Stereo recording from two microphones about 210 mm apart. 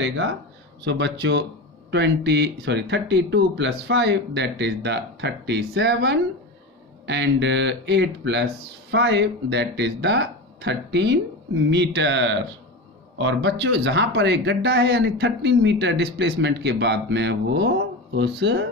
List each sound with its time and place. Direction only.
0.0 s speech: 65° right (ahead or behind)